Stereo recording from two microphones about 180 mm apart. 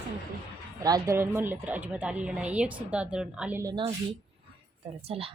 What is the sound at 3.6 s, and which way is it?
Speech, 25° right (ahead or behind).